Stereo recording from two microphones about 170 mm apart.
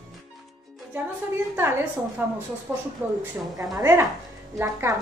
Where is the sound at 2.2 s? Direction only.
10° right (ahead or behind).